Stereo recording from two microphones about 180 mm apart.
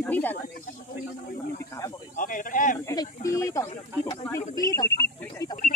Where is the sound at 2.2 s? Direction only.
50° left (ahead or behind).